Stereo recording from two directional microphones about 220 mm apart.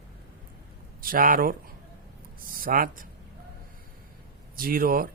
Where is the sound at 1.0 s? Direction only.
40° right (ahead or behind).